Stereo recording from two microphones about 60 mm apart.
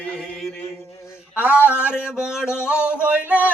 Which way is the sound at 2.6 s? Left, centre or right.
Centre.